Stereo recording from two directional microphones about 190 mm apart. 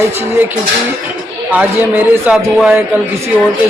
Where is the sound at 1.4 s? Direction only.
10° right (ahead or behind).